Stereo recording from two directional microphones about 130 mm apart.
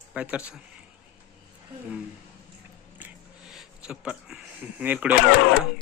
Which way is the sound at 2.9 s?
10° right (ahead or behind).